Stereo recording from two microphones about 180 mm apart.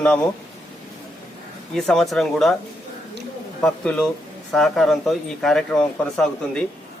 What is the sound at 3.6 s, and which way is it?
Speech, 5° left (ahead or behind).